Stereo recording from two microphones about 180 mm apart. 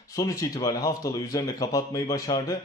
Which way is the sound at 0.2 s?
20° left (ahead or behind).